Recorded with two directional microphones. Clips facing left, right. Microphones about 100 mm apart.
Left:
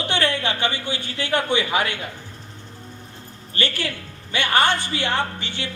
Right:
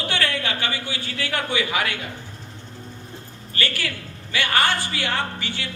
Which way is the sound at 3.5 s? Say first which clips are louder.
Left 2 dB; 25° left (ahead or behind).